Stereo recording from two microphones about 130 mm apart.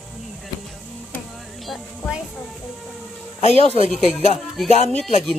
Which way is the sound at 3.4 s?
55° left (ahead or behind).